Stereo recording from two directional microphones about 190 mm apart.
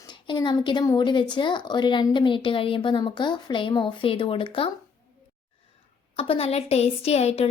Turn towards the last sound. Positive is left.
turn(degrees=35)  # may be behind; listen again after turning